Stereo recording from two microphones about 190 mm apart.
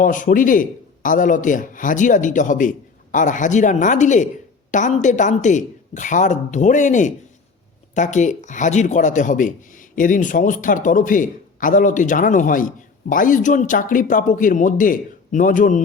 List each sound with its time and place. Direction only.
0.0 s speech: 45° left (ahead or behind)